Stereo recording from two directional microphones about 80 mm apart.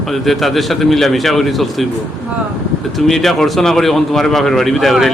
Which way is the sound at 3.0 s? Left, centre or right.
Centre.